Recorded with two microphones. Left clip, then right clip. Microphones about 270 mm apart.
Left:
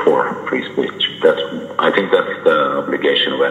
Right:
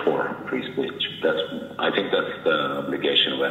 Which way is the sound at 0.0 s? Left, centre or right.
Left.